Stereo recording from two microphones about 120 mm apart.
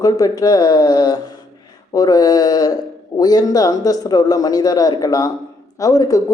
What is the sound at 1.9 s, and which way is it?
A man's voice, 30° left (ahead or behind).